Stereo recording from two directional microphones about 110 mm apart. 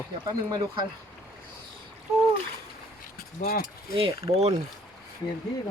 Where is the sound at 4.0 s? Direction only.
60° right (ahead or behind).